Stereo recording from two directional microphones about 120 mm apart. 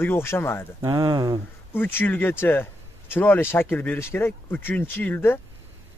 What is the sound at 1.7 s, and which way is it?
Speech, 20° left (ahead or behind).